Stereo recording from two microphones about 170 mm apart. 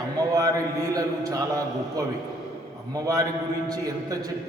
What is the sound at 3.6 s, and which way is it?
Speech, 20° right (ahead or behind).